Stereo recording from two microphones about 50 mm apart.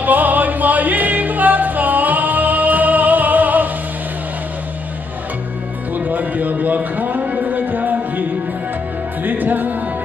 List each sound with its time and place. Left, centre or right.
0.0 s music: right
5.9 s a sound: right
9.2 s music: right